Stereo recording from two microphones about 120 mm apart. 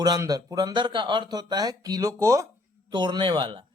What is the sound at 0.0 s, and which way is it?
A man's voice, 30° right (ahead or behind).